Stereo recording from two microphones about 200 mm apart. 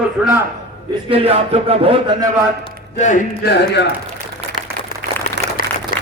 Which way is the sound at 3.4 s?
55° left (ahead or behind).